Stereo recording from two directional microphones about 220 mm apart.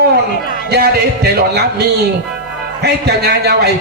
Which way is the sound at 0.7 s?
50° right (ahead or behind).